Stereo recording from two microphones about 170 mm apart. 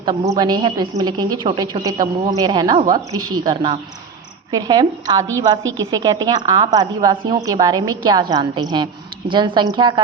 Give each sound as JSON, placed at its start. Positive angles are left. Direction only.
{"t": 0.0, "sound": "a woman's voice", "side_deg": -25}